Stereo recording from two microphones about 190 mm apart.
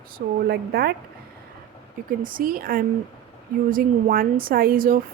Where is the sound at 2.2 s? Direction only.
45° right (ahead or behind).